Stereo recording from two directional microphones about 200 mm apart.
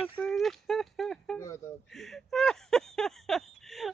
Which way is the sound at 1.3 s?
15° left (ahead or behind).